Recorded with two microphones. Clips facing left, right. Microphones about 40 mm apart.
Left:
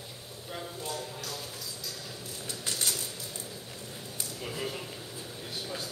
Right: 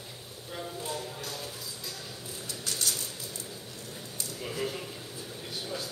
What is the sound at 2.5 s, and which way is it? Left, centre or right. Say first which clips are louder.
Cutlery: even; left.